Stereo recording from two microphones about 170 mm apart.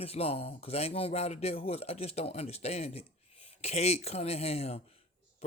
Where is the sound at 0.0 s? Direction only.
35° left (ahead or behind).